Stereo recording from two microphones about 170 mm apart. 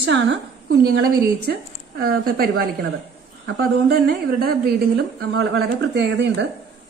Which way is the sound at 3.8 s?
65° right (ahead or behind).